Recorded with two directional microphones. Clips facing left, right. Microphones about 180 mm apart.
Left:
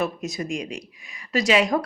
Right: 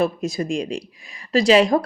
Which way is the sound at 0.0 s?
30° right (ahead or behind).